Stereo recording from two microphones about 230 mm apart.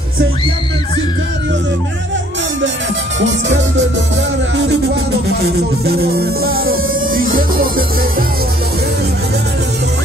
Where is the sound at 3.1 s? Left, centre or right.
Right.